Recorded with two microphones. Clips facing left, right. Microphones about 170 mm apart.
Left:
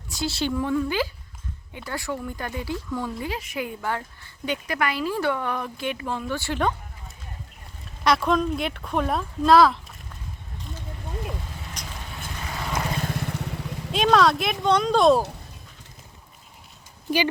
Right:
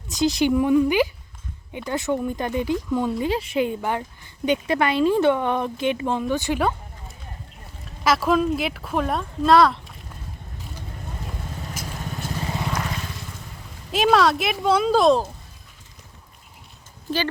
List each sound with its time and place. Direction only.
0.1 s speech: 15° right (ahead or behind)
8.0 s speech: 5° right (ahead or behind)
11.8 s vehicle: 5° right (ahead or behind)
12.4 s vehicle: 25° right (ahead or behind)
13.0 s vehicle: 55° left (ahead or behind)
13.9 s speech: 5° right (ahead or behind)